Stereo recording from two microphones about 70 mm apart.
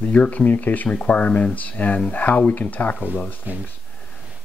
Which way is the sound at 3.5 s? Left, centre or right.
Right.